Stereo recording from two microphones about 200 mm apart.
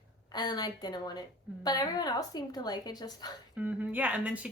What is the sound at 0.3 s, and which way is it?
A woman's voice, 20° left (ahead or behind).